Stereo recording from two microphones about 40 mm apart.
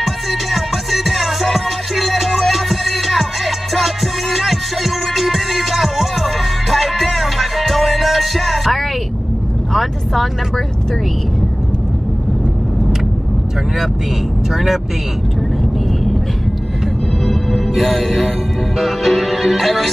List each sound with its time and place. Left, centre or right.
0.0 s music: centre
14.5 s speech: centre
17.2 s music: centre